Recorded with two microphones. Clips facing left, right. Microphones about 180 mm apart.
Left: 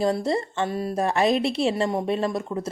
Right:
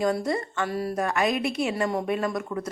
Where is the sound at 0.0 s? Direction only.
30° left (ahead or behind).